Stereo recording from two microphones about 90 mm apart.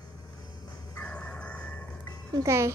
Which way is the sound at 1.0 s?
10° left (ahead or behind).